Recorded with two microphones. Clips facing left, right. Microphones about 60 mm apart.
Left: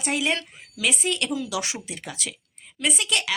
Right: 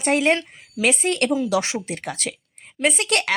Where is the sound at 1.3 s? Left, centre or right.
Right.